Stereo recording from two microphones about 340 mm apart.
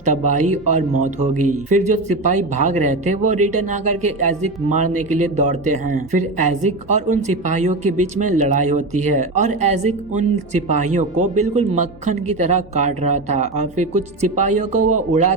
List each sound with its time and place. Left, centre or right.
0.0 s speech: right